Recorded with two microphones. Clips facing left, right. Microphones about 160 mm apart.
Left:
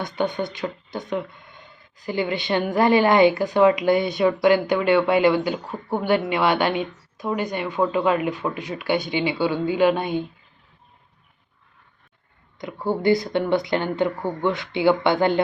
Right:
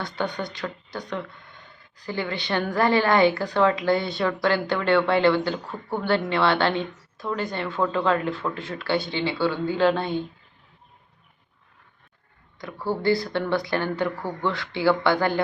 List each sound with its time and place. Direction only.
0.0 s a woman's voice: 20° left (ahead or behind)
12.5 s speech: 20° left (ahead or behind)